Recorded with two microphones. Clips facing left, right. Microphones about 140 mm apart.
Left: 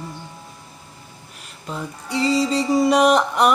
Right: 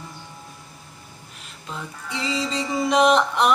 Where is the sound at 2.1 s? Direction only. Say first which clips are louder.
Left 7 dB; 40° left (ahead or behind).